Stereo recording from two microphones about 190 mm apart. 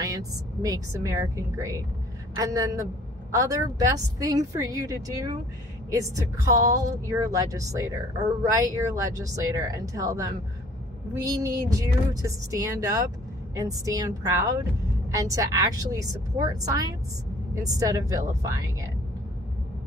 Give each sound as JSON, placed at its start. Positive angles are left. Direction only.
{"t": 0.0, "sound": "speech", "side_deg": -15}